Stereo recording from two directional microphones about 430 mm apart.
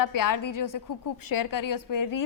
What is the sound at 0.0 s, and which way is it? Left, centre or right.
A woman's voice, left.